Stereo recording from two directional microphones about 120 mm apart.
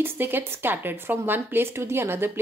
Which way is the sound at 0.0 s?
20° right (ahead or behind).